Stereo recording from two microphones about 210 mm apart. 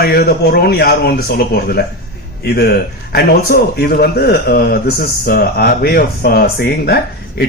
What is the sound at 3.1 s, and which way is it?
A man's voice, 50° left (ahead or behind).